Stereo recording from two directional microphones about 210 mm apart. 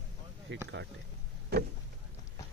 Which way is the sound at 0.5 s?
60° right (ahead or behind).